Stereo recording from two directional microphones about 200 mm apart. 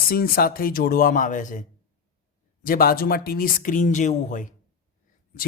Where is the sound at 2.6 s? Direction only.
45° left (ahead or behind).